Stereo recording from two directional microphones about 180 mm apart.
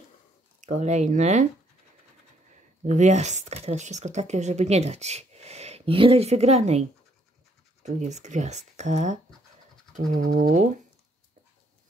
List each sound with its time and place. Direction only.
0.6 s speech: 40° right (ahead or behind)
2.8 s speech: 40° right (ahead or behind)